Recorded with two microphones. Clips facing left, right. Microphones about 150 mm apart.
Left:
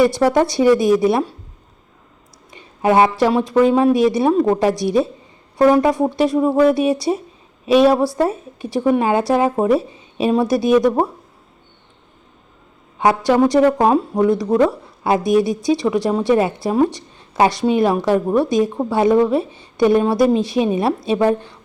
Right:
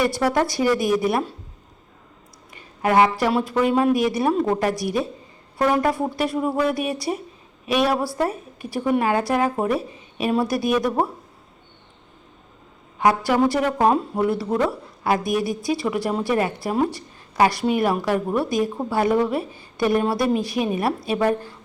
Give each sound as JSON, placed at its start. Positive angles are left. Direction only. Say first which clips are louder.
{"t": 0.3, "sound": "a woman's voice", "louder": "left 6 dB", "side_deg": 25}
{"t": 2.5, "sound": "a sound", "louder": "left 5 dB", "side_deg": 25}
{"t": 3.3, "sound": "a woman's voice", "louder": "left 5 dB", "side_deg": 20}
{"t": 13.0, "sound": "a woman's voice", "louder": "left 4 dB", "side_deg": 25}